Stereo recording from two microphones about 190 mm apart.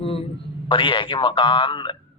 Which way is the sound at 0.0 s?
30° left (ahead or behind).